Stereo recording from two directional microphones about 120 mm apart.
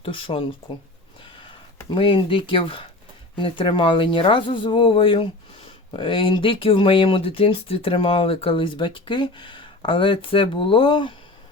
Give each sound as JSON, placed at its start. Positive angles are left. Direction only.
{"t": 0.0, "sound": "speech", "side_deg": 50}
{"t": 1.9, "sound": "speech", "side_deg": 45}